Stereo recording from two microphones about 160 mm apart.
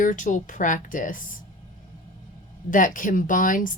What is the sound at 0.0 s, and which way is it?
A woman's voice, 50° left (ahead or behind).